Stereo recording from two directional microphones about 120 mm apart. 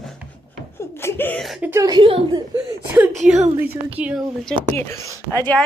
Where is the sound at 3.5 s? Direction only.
15° right (ahead or behind).